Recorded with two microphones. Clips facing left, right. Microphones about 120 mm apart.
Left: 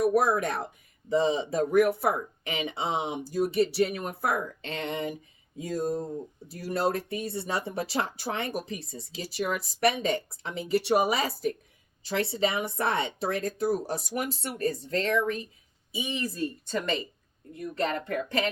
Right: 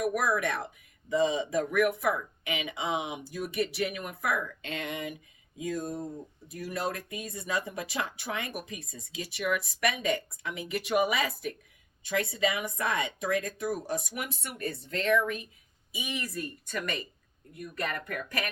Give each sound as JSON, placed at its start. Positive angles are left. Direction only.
{"t": 0.0, "sound": "speech", "side_deg": 30}